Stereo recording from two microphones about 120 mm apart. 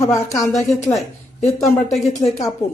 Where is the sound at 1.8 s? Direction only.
Centre (ahead or behind).